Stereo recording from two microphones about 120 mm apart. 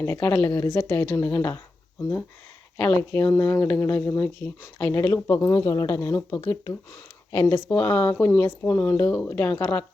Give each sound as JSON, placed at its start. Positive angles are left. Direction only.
{"t": 0.0, "sound": "speech", "side_deg": 15}
{"t": 0.6, "sound": "speech", "side_deg": 30}
{"t": 2.7, "sound": "speech", "side_deg": 15}
{"t": 7.7, "sound": "speech", "side_deg": 10}